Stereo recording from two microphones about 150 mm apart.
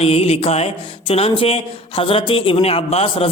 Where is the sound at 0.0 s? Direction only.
45° left (ahead or behind).